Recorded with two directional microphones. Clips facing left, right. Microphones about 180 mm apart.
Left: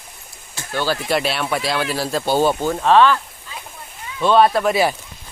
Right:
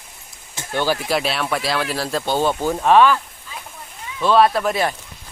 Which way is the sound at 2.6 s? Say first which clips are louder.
Even; 10° right (ahead or behind).